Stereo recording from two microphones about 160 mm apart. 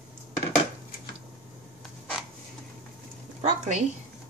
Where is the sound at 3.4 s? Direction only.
45° right (ahead or behind).